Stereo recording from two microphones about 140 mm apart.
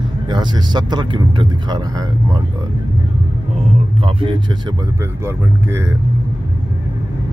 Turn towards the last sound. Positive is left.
turn(degrees=-20)  # may be behind; listen again after turning